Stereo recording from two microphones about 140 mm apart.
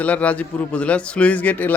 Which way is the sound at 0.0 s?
10° left (ahead or behind).